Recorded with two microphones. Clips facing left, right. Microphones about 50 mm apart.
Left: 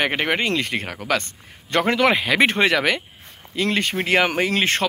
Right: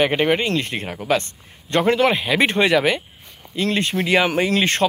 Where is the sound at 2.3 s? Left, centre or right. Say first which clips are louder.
Right 1 dB; left.